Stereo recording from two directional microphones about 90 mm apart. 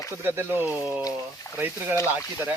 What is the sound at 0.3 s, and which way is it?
Speech, 25° right (ahead or behind).